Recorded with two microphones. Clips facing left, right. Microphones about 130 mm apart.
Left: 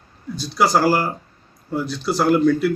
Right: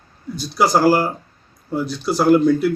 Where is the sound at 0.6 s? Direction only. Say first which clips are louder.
Right 1 dB; 15° right (ahead or behind).